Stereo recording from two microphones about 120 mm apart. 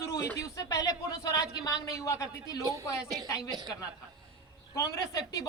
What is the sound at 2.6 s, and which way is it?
Speech, 30° right (ahead or behind).